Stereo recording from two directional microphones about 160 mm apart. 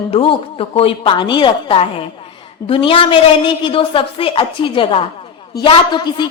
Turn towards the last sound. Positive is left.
turn(degrees=30)  # may be behind; listen again after turning